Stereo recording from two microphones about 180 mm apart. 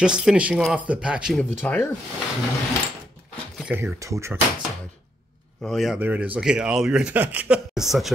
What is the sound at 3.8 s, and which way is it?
Speech, 15° right (ahead or behind).